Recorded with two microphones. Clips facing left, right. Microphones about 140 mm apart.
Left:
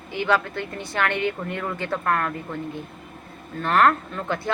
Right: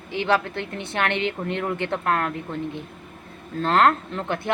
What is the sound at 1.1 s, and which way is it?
Speech, 75° right (ahead or behind).